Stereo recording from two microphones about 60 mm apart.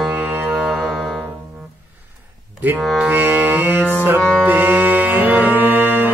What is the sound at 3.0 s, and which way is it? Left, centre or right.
Mantra, right.